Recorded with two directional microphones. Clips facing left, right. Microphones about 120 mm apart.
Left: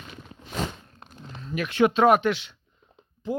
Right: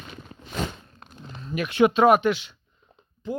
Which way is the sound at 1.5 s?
15° right (ahead or behind).